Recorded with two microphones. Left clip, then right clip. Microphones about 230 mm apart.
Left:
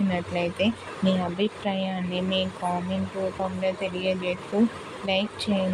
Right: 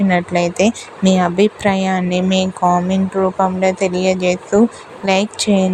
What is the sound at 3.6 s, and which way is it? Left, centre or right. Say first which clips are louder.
A woman's voice: right 8 dB; right.